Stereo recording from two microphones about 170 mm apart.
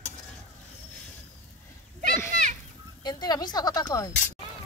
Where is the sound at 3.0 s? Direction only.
25° left (ahead or behind).